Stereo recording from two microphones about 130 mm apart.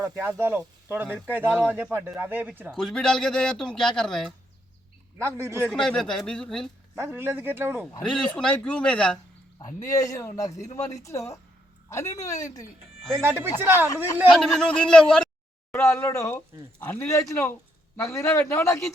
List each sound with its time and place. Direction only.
0.3 s speech: 15° right (ahead or behind)
2.7 s a man's voice: 5° left (ahead or behind)
5.1 s a man's voice: 20° right (ahead or behind)
5.6 s a man's voice: 5° left (ahead or behind)
6.9 s speech: 20° right (ahead or behind)
8.0 s a man's voice: 5° left (ahead or behind)
9.6 s a man's voice: 30° left (ahead or behind)
13.1 s a man's voice: 20° right (ahead or behind)
13.8 s a man's voice: 25° left (ahead or behind)
14.3 s a man's voice: 5° left (ahead or behind)
15.7 s a man's voice: 20° left (ahead or behind)